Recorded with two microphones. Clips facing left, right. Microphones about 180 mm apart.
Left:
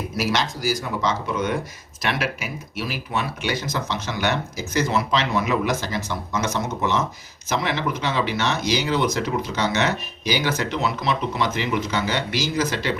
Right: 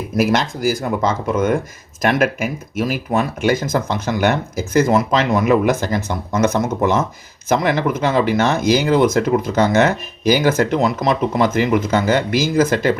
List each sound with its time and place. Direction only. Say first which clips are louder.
0.2 s speech: right 7 dB; 50° right (ahead or behind)